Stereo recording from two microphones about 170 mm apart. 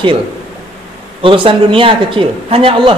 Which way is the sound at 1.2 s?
30° right (ahead or behind).